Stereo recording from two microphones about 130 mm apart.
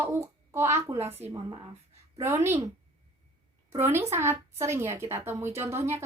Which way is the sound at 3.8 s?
15° right (ahead or behind).